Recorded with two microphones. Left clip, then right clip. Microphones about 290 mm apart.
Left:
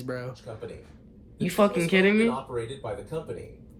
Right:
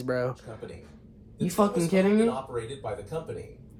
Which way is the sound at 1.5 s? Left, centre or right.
Centre.